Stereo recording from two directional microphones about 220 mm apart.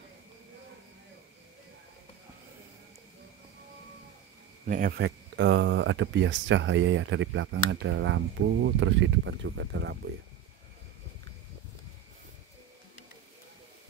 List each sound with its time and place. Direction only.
4.6 s speech: 40° right (ahead or behind)